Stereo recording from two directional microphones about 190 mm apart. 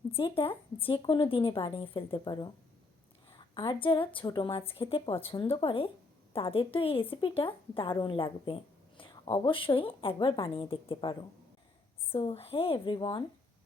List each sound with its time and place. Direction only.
0.1 s speech: 25° left (ahead or behind)